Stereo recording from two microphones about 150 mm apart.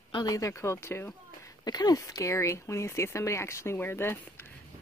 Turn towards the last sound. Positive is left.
turn(degrees=15)  # may be behind; listen again after turning